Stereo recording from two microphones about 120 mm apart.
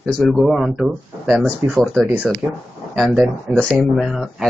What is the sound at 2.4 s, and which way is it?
Speech, 10° left (ahead or behind).